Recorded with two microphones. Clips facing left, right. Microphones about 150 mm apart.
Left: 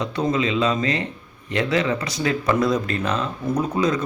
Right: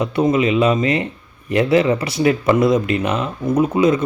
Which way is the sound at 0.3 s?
20° right (ahead or behind).